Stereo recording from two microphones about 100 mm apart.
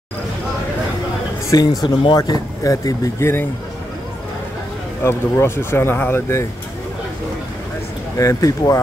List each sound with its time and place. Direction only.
1.5 s speech: 40° left (ahead or behind)
5.0 s speech: 25° left (ahead or behind)
8.2 s speech: 35° left (ahead or behind)